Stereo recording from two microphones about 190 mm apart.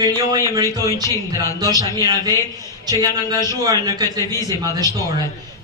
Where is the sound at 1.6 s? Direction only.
20° right (ahead or behind).